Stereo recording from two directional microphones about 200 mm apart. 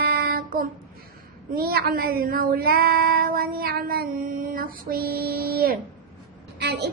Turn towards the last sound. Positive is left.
turn(degrees=-55)  # may be behind; listen again after turning